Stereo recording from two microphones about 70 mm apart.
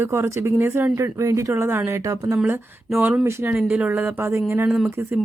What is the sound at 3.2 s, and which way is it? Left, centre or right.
Speech, right.